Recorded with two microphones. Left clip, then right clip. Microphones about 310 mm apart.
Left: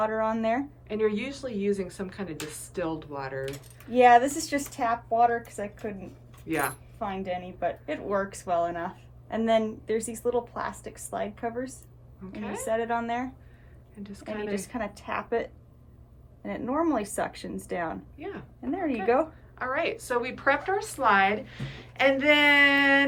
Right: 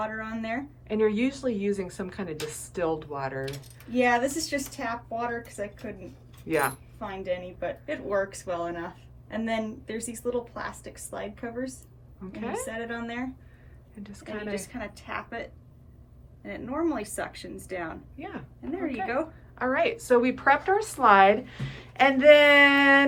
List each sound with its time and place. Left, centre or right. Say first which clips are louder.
0.0 s a woman's voice: left 7 dB; centre
0.9 s a woman's voice: right 3 dB; centre
3.9 s a woman's voice: left 6 dB; centre
6.4 s speech: right 3 dB; centre
7.0 s a woman's voice: even; centre
12.2 s a woman's voice: right 3 dB; centre
12.6 s a woman's voice: left 7 dB; centre
14.5 s speech: left 2 dB; centre
18.2 s a woman's voice: left 1 dB; centre
19.0 s speech: left 7 dB; centre
19.5 s a woman's voice: right 3 dB; centre